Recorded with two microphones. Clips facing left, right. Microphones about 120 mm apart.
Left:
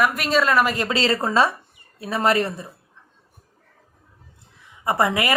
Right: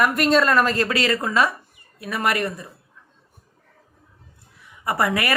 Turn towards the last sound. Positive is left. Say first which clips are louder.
# left 1 dB
turn(degrees=20)  # may be behind; listen again after turning